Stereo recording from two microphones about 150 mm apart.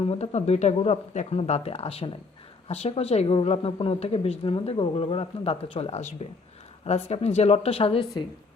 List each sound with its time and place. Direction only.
0.0 s a woman's voice: 40° left (ahead or behind)